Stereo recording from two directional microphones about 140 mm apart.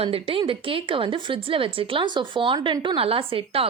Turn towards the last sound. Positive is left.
turn(degrees=-40)  # may be behind; listen again after turning